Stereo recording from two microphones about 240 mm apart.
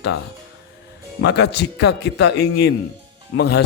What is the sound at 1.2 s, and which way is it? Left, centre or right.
A man's voice, left.